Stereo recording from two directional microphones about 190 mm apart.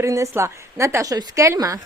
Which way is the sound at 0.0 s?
15° right (ahead or behind).